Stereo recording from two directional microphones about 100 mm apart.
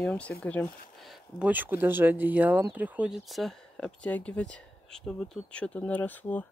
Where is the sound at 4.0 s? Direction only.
15° left (ahead or behind).